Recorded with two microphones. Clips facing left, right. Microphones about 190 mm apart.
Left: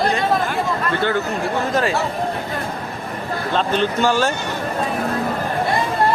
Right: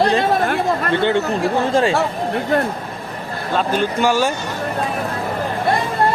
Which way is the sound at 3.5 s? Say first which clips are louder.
Right 1 dB; 10° right (ahead or behind).